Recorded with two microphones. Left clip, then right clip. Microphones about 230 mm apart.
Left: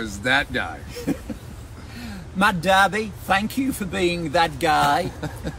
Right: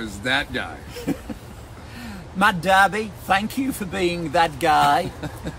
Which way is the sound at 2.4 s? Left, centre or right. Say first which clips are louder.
Right 1 dB; centre.